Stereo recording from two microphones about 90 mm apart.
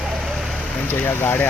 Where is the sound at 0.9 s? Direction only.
25° left (ahead or behind).